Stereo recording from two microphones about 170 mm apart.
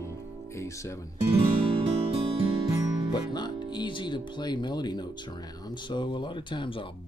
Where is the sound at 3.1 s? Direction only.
25° left (ahead or behind).